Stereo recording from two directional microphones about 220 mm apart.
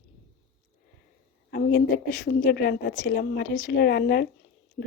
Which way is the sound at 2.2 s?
45° left (ahead or behind).